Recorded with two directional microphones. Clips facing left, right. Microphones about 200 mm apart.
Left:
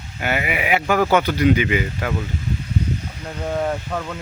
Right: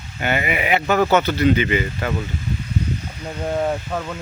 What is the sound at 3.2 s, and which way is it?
Speech, 5° right (ahead or behind).